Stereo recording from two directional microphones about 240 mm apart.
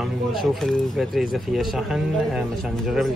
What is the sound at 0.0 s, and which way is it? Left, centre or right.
Speech, centre.